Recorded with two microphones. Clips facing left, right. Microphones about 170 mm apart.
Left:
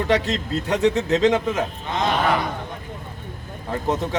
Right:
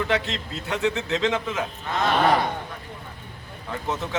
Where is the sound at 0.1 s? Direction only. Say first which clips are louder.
Left 5 dB; 40° left (ahead or behind).